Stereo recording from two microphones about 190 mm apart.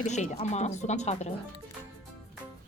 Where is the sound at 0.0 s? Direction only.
40° left (ahead or behind).